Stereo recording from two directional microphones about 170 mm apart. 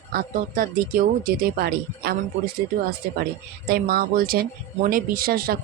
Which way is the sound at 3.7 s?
60° right (ahead or behind).